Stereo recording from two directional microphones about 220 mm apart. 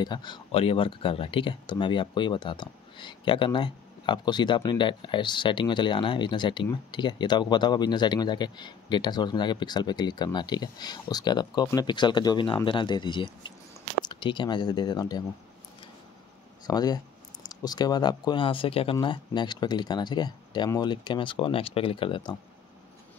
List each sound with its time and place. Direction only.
0.0 s speech: 20° left (ahead or behind)
16.6 s speech: 15° left (ahead or behind)